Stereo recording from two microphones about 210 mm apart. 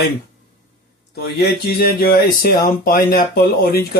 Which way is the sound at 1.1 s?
50° left (ahead or behind).